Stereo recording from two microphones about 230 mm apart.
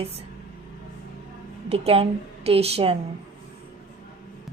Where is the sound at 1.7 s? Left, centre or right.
Right.